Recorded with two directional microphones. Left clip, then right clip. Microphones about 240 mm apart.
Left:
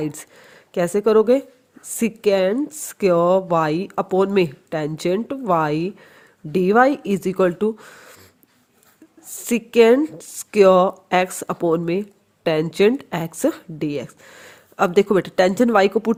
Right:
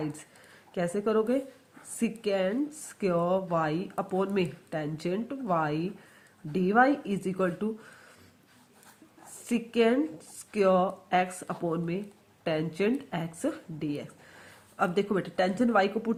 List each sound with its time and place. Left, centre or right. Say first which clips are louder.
0.0 s a woman's voice: left 9 dB; left
9.5 s a woman's voice: left 12 dB; left